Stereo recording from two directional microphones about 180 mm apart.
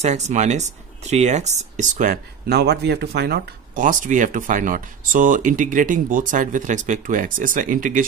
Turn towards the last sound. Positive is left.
turn(degrees=-45)  # may be behind; listen again after turning